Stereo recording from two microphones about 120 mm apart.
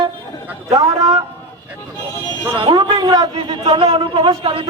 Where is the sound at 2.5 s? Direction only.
40° right (ahead or behind).